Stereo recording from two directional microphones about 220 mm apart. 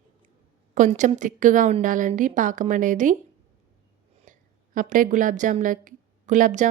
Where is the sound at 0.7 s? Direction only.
35° right (ahead or behind).